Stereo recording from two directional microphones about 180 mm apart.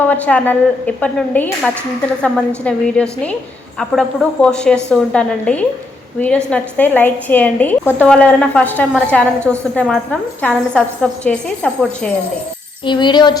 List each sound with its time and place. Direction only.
0.0 s a woman's voice: 10° left (ahead or behind)
12.8 s speech: 25° left (ahead or behind)